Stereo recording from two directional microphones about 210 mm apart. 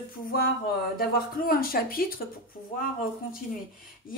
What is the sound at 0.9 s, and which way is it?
A woman's voice, 45° left (ahead or behind).